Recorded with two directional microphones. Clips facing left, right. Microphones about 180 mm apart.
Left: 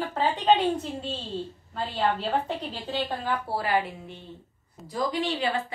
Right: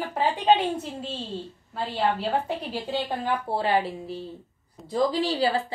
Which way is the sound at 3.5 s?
25° right (ahead or behind).